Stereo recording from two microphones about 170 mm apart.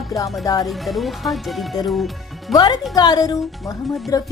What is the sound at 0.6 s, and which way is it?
Speech, centre (ahead or behind).